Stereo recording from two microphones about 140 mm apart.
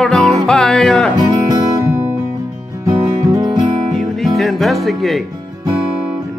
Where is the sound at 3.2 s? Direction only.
25° right (ahead or behind).